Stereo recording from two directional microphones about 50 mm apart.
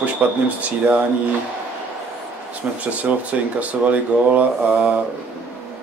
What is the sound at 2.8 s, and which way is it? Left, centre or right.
A man's voice, right.